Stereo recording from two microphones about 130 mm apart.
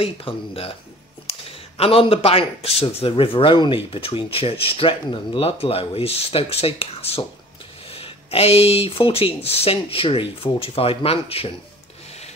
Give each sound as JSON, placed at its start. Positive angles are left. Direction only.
{"t": 0.0, "sound": "speech", "side_deg": 45}
{"t": 1.8, "sound": "speech", "side_deg": 45}